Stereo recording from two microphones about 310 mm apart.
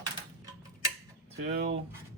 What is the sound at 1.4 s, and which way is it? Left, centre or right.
Speech, right.